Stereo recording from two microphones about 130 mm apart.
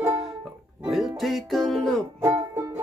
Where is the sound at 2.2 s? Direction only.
25° right (ahead or behind).